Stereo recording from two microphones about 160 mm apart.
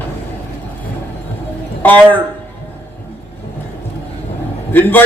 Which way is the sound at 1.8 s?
10° left (ahead or behind).